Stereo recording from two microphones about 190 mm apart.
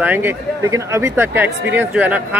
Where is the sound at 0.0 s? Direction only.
10° right (ahead or behind).